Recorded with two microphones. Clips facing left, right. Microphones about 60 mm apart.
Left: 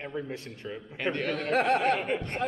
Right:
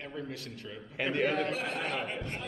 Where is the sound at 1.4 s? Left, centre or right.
Left.